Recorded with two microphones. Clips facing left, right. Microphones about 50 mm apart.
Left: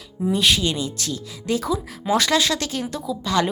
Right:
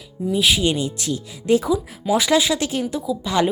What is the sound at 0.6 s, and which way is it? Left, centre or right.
Speech, right.